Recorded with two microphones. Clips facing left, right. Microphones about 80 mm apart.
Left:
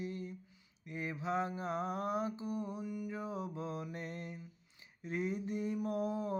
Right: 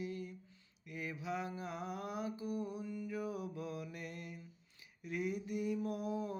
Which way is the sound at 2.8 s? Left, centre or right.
Centre.